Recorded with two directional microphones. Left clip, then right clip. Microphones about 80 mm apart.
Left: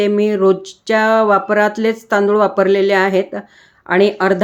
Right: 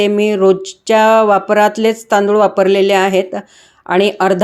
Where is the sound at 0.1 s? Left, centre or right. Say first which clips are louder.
Right 2 dB; right.